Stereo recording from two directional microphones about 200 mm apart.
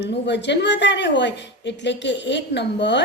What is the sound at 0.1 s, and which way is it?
A woman's voice, 60° left (ahead or behind).